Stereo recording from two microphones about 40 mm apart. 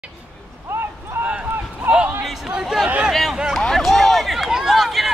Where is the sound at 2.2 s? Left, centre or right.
Centre.